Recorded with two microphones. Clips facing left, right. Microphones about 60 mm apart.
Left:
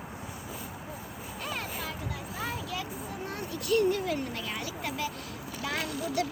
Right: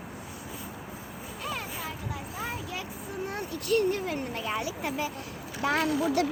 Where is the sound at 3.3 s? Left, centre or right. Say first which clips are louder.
Right 1 dB; right.